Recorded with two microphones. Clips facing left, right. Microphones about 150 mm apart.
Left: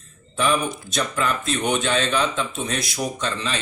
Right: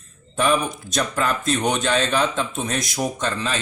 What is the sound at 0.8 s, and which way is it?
A man's voice, 40° right (ahead or behind).